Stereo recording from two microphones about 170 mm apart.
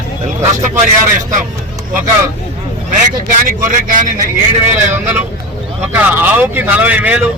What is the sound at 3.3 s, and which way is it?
Speech, 55° right (ahead or behind).